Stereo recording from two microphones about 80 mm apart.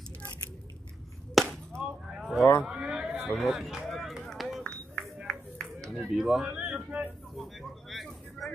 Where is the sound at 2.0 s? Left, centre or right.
Centre.